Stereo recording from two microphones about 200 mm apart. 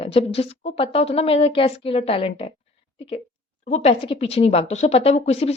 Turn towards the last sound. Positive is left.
turn(degrees=30)  # may be behind; listen again after turning